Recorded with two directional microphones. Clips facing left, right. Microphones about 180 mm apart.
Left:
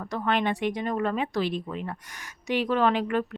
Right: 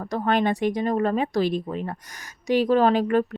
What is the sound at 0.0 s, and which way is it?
A woman's voice, 40° right (ahead or behind).